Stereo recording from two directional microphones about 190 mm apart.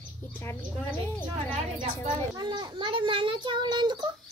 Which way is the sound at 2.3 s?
20° right (ahead or behind).